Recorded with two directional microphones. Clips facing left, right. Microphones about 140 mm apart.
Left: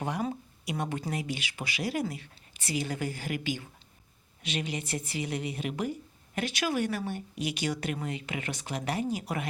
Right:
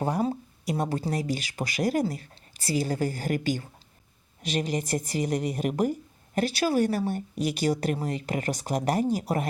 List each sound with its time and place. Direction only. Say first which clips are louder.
0.0 s a woman's voice: right 5 dB; 35° right (ahead or behind)